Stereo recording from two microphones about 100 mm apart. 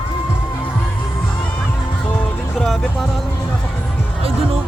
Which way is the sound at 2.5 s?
5° left (ahead or behind).